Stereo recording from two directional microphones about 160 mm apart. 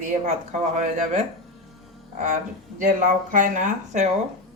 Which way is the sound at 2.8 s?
55° right (ahead or behind).